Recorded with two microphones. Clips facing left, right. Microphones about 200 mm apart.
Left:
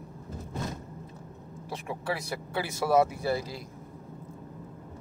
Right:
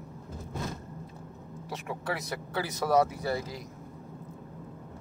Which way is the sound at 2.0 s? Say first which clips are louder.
Left 2 dB; 30° left (ahead or behind).